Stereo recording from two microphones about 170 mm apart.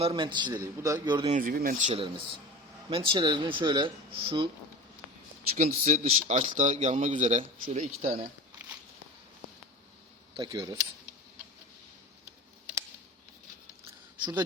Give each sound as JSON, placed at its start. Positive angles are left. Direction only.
{"t": 0.0, "sound": "speech", "side_deg": -30}
{"t": 1.3, "sound": "speech", "side_deg": -55}
{"t": 1.9, "sound": "speech", "side_deg": -35}
{"t": 5.5, "sound": "speech", "side_deg": -45}
{"t": 6.9, "sound": "speech", "side_deg": -30}
{"t": 7.2, "sound": "speech", "side_deg": -45}
{"t": 10.3, "sound": "speech", "side_deg": -25}